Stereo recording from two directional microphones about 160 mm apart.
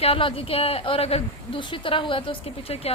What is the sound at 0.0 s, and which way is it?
A woman's voice, 35° left (ahead or behind).